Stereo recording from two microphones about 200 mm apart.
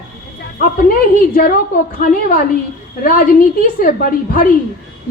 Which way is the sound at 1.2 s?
45° left (ahead or behind).